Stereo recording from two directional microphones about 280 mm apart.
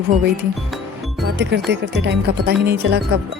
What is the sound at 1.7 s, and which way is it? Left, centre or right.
Music, right.